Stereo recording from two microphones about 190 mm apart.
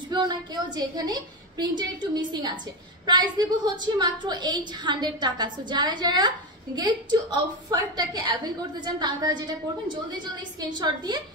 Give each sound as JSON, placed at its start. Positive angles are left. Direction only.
{"t": 0.1, "sound": "a woman's voice", "side_deg": -20}
{"t": 10.6, "sound": "a woman's voice", "side_deg": -20}